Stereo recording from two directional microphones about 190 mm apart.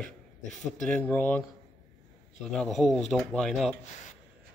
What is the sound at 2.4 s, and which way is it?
Speech, centre (ahead or behind).